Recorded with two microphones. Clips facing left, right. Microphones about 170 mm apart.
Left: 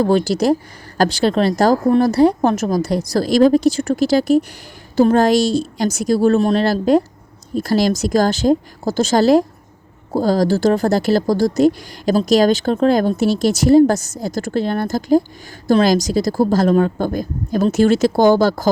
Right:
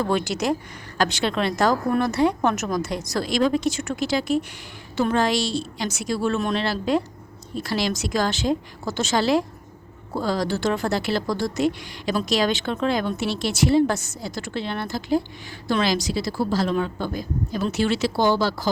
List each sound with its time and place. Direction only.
0.0 s a woman's voice: 35° left (ahead or behind)